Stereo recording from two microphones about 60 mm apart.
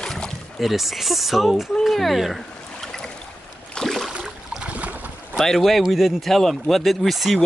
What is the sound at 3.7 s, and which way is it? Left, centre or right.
Boat, centre.